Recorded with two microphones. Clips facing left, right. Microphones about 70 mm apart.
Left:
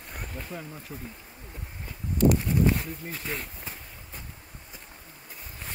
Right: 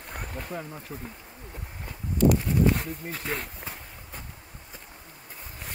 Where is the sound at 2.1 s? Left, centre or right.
Left.